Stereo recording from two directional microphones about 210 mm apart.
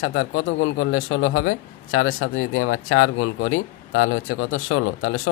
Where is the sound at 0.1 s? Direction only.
70° left (ahead or behind).